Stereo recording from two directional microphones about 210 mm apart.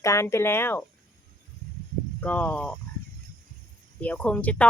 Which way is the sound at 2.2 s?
5° left (ahead or behind).